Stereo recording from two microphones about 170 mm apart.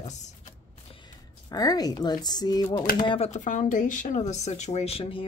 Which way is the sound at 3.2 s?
45° left (ahead or behind).